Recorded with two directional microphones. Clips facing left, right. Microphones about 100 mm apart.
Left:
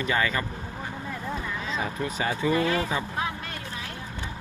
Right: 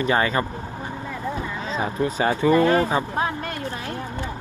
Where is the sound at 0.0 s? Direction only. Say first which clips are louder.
Right 5 dB; 35° right (ahead or behind).